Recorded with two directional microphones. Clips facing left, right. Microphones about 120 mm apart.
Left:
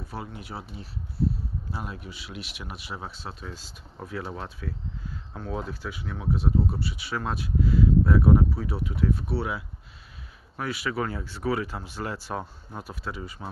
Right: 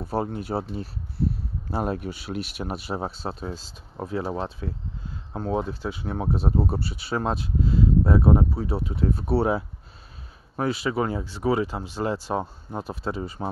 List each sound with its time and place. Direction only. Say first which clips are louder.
0.1 s speech: right 12 dB; 40° right (ahead or behind)
1.7 s speech: right 13 dB; 50° right (ahead or behind)
10.5 s speech: right 5 dB; 30° right (ahead or behind)